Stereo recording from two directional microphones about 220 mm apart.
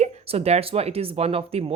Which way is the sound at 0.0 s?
30° right (ahead or behind).